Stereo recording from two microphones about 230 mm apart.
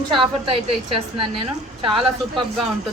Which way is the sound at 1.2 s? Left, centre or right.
Right.